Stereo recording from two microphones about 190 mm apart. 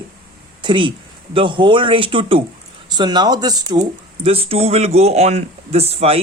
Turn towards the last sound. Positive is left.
turn(degrees=-30)  # may be behind; listen again after turning